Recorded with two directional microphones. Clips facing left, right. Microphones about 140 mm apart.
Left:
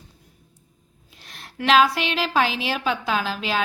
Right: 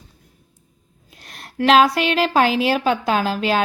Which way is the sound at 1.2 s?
45° right (ahead or behind).